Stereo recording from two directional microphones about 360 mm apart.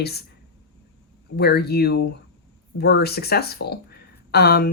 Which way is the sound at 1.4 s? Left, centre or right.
Left.